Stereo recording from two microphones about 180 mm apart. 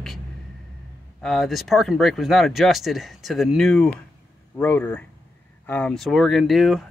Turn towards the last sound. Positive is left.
turn(degrees=0)  # may be behind; listen again after turning